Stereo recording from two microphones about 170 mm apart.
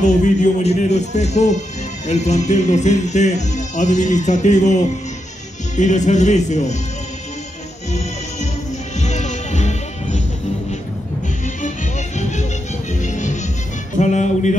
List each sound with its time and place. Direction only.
0.0 s a man's voice: 45° left (ahead or behind)
9.0 s music: 45° left (ahead or behind)
12.2 s music: 45° left (ahead or behind)